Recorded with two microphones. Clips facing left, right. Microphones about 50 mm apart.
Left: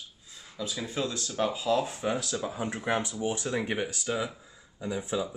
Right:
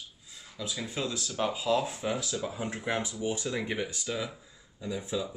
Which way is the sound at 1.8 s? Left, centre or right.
Left.